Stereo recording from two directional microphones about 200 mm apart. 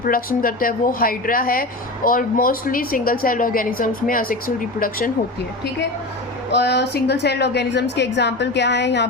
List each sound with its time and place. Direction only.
0.0 s a woman's voice: 45° left (ahead or behind)
6.5 s a woman's voice: 55° left (ahead or behind)